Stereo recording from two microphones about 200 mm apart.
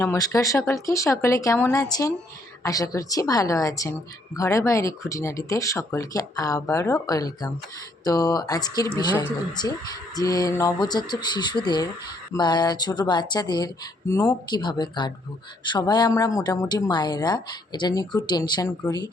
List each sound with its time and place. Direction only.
0.0 s speech: 15° left (ahead or behind)